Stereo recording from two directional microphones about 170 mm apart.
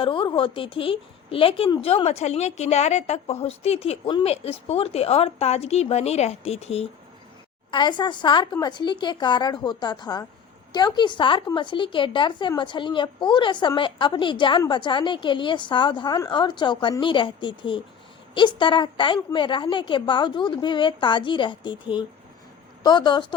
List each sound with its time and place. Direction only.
0.0 s a woman's voice: 30° left (ahead or behind)